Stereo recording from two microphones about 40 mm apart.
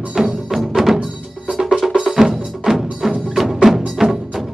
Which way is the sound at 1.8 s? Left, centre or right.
Centre.